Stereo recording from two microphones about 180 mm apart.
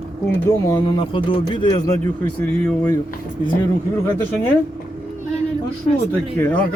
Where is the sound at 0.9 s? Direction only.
30° left (ahead or behind).